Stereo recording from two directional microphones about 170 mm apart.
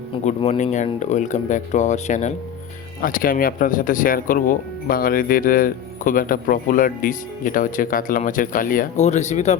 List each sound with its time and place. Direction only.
0.1 s speech: 40° left (ahead or behind)
3.0 s speech: 55° left (ahead or behind)